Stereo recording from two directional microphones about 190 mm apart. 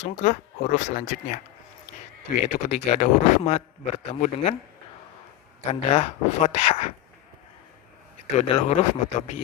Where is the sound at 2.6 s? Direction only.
35° left (ahead or behind).